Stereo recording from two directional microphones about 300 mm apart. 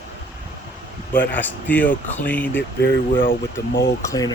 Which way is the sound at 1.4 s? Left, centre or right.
Centre.